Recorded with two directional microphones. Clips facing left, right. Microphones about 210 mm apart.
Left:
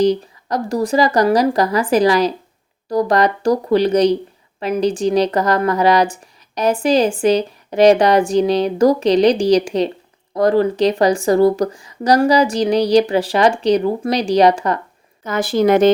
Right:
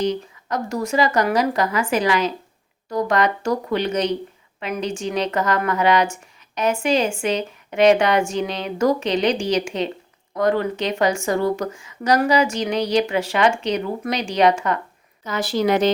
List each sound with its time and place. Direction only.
0.0 s speech: 35° left (ahead or behind)
15.2 s a woman's voice: 50° left (ahead or behind)